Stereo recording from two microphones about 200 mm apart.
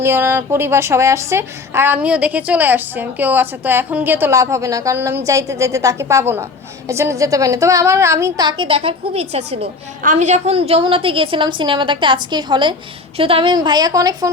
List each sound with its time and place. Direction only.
0.0 s a woman's voice: 10° right (ahead or behind)